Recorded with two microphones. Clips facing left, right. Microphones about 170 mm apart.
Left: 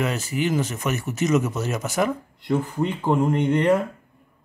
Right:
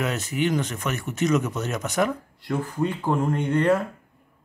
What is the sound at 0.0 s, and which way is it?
Speech, centre (ahead or behind).